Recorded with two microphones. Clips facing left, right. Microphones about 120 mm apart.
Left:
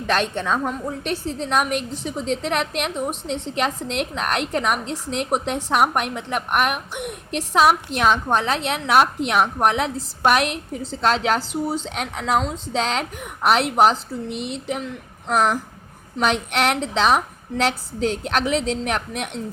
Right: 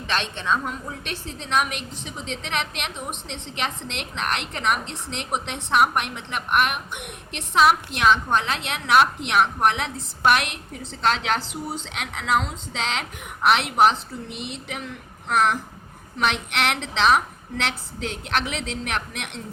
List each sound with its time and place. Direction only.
0.1 s a woman's voice: 45° left (ahead or behind)